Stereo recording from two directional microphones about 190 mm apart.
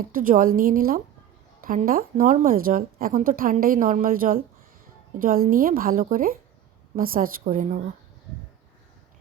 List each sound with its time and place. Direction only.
0.0 s speech: 45° right (ahead or behind)